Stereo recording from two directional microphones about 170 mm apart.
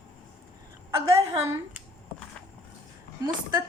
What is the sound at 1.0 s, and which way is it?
Speech, 15° right (ahead or behind).